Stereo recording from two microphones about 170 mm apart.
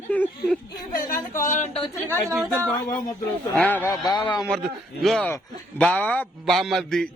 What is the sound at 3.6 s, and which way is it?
Snicker, 10° left (ahead or behind).